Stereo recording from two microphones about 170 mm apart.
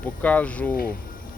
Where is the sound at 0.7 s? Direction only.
60° left (ahead or behind).